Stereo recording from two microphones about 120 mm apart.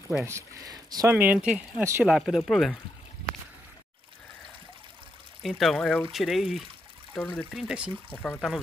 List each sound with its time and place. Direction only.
0.2 s speech: 25° right (ahead or behind)
1.0 s speech: 15° right (ahead or behind); by 2.8 s centre (ahead or behind)
5.4 s speech: centre (ahead or behind)
7.2 s speech: 15° left (ahead or behind)
7.5 s speech: 5° right (ahead or behind)
8.1 s speech: 15° left (ahead or behind)